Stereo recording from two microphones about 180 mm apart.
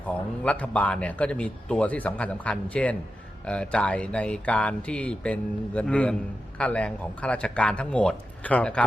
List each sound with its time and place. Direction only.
0.4 s a man's voice: 5° left (ahead or behind)